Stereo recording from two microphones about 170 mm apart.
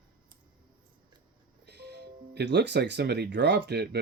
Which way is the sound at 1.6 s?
80° right.